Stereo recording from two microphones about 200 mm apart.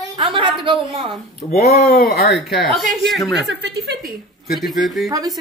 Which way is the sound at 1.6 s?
30° left (ahead or behind).